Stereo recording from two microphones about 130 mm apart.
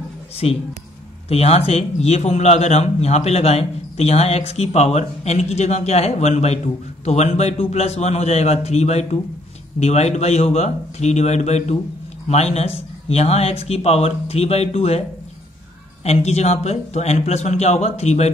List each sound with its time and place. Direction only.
0.4 s a man's voice: 50° left (ahead or behind)